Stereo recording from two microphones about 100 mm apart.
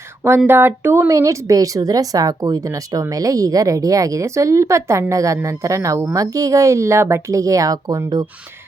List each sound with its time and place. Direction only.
0.2 s speech: 20° right (ahead or behind); by 8.3 s 40° right (ahead or behind)